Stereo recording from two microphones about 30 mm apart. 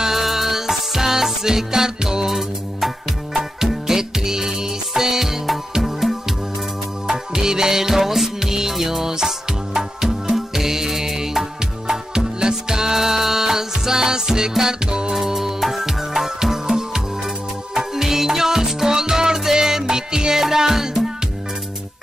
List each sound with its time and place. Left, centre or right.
0.0 s music: centre
3.8 s music: centre
7.1 s music: right